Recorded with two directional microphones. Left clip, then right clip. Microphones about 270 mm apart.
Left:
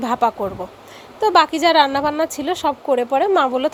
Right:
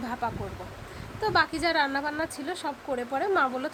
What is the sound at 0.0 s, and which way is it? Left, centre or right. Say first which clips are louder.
Speech: left 14 dB; left.